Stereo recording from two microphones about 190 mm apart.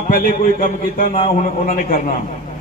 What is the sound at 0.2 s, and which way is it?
A man's voice, 45° left (ahead or behind).